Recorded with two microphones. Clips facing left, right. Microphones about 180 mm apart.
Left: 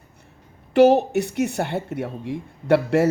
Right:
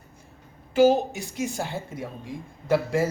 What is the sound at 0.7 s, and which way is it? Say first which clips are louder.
Speech: left 4 dB; 65° left (ahead or behind).